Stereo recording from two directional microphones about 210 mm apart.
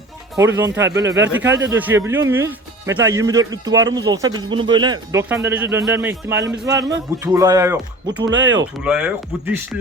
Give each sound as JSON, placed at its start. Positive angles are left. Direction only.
{"t": 0.3, "sound": "speech", "side_deg": -10}
{"t": 5.3, "sound": "speech", "side_deg": -10}
{"t": 8.3, "sound": "speech", "side_deg": -60}
{"t": 8.8, "sound": "speech", "side_deg": -5}